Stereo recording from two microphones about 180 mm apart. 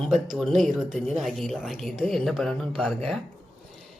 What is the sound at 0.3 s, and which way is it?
Speech, centre (ahead or behind).